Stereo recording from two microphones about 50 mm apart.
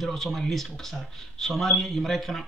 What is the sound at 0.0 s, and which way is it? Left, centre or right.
Speech, centre.